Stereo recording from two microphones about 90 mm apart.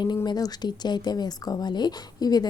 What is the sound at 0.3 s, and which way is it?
Speech, 45° left (ahead or behind).